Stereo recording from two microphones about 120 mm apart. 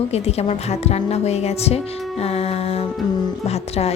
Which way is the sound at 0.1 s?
60° left (ahead or behind).